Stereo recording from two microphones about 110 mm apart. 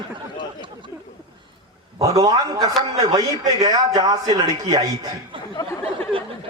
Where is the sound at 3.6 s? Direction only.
35° right (ahead or behind).